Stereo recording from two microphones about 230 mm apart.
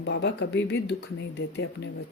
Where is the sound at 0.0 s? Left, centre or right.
Left.